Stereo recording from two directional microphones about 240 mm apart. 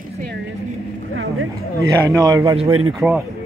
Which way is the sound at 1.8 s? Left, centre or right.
Centre.